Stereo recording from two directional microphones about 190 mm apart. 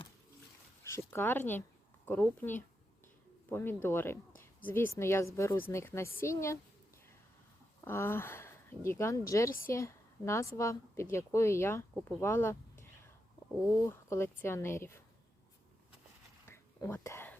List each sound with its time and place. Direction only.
0.9 s a woman's voice: 10° left (ahead or behind)
7.8 s speech: 15° left (ahead or behind)
9.5 s a woman's voice: 50° left (ahead or behind)
9.7 s a woman's voice: 15° left (ahead or behind)
13.8 s a woman's voice: 15° left (ahead or behind)
16.5 s whispering: 15° left (ahead or behind)